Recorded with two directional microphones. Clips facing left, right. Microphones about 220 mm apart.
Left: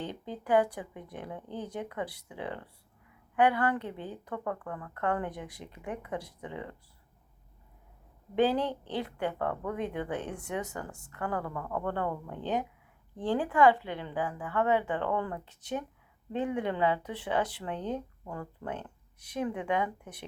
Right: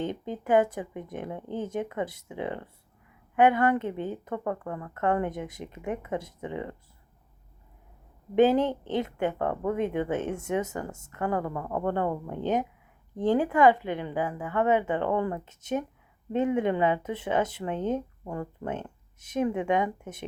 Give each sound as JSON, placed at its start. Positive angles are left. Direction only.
{"t": 0.0, "sound": "speech", "side_deg": -20}
{"t": 8.4, "sound": "speech", "side_deg": -20}